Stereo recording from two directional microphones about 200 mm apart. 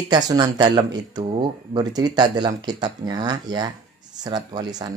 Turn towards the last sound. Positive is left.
turn(degrees=-20)  # may be behind; listen again after turning